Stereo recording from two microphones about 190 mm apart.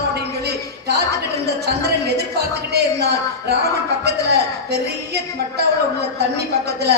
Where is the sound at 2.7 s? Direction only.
60° right (ahead or behind).